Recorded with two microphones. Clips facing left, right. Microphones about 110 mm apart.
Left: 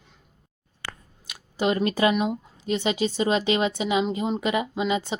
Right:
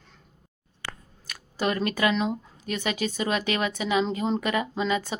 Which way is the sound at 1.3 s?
20° left (ahead or behind).